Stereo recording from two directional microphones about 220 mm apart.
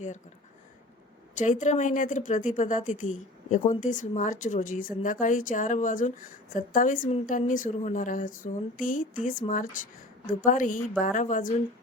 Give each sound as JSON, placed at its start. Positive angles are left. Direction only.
{"t": 1.4, "sound": "speech", "side_deg": 35}